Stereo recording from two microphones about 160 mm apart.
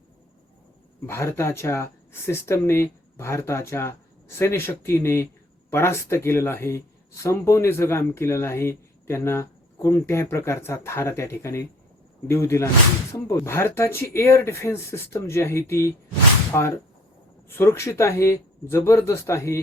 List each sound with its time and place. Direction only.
1.0 s speech: 15° left (ahead or behind)